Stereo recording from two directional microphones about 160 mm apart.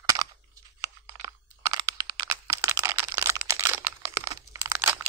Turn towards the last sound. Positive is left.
turn(degrees=-15)  # may be behind; listen again after turning